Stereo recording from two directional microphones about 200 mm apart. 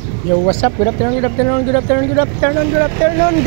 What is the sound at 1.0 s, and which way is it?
Speech, 45° left (ahead or behind).